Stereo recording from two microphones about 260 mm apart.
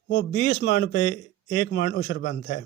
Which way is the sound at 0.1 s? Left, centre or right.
Left.